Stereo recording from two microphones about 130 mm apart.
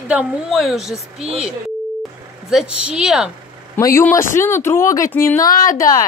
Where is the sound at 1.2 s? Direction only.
50° right (ahead or behind).